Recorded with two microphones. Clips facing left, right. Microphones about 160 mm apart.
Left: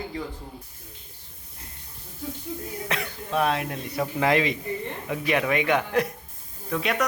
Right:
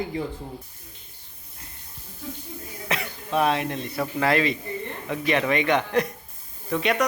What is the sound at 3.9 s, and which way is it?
Speech, 15° left (ahead or behind).